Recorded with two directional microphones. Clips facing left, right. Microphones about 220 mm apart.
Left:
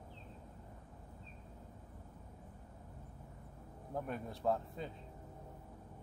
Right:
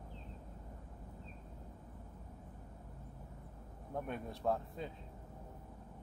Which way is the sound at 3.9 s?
Centre (ahead or behind).